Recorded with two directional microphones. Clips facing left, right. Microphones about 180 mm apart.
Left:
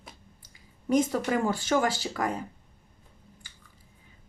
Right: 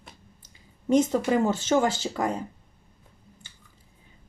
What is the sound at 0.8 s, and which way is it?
Speech, 25° right (ahead or behind).